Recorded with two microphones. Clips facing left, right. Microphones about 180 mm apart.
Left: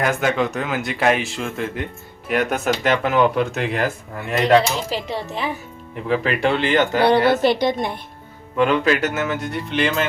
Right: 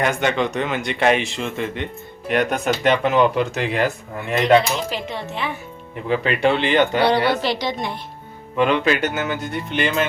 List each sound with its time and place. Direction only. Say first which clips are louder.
0.0 s speech: even; centre (ahead or behind)
4.9 s speech: left 2 dB; 35° left (ahead or behind)
6.1 s speech: right 1 dB; centre (ahead or behind)
7.4 s a woman's voice: left 5 dB; 55° left (ahead or behind)
8.5 s speech: left 1 dB; centre (ahead or behind)